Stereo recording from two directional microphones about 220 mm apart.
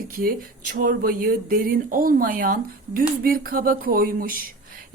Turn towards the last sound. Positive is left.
turn(degrees=-40)  # may be behind; listen again after turning